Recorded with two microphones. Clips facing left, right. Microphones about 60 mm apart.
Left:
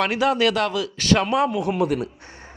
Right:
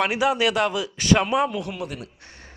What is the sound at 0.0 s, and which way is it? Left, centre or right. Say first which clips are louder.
A man's voice: left 1 dB; centre.